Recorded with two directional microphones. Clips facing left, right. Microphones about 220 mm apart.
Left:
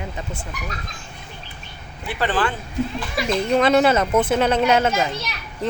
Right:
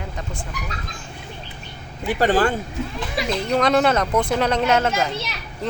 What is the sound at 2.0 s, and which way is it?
Speech, 40° right (ahead or behind).